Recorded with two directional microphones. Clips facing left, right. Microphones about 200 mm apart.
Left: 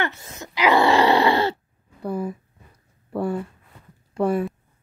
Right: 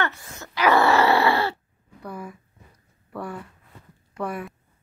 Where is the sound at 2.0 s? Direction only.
25° left (ahead or behind).